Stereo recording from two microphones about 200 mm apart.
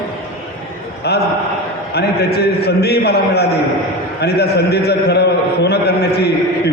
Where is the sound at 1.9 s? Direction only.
55° left (ahead or behind).